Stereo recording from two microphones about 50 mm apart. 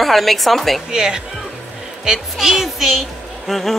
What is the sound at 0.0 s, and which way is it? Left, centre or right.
Speech, centre.